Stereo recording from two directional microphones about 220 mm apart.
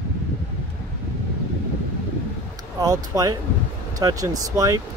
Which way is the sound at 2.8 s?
15° right (ahead or behind).